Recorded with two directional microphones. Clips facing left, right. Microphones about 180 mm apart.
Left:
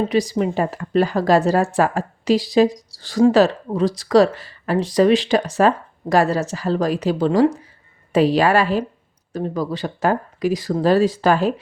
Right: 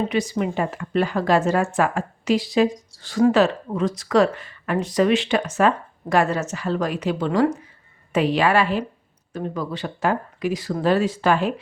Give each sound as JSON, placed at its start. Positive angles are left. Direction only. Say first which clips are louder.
{"t": 0.1, "sound": "speech", "louder": "left 4 dB", "side_deg": 35}